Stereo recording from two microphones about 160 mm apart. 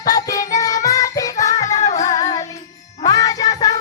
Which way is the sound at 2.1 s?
20° left (ahead or behind).